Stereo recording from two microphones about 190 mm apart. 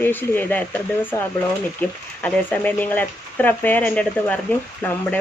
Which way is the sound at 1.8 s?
10° left (ahead or behind).